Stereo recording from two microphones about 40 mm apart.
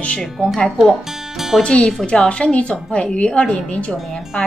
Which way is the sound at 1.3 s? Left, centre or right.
Centre.